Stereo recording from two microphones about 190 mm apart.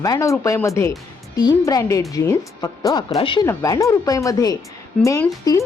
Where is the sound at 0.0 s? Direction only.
15° left (ahead or behind).